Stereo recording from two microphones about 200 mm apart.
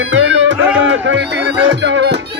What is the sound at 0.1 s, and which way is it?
Music, 65° right (ahead or behind).